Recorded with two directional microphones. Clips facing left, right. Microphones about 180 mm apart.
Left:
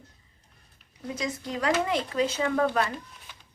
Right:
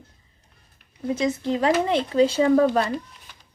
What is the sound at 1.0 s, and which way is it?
Speech, 25° right (ahead or behind).